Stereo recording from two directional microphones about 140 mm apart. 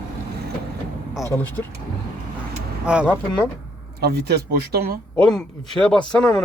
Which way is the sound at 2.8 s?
10° right (ahead or behind).